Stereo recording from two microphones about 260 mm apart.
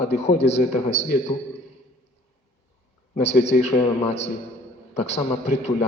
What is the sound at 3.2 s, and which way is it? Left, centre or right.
A man's voice, left.